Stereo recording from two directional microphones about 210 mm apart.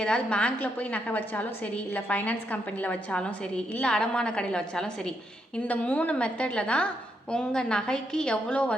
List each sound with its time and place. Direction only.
0.0 s a woman's voice: 5° left (ahead or behind)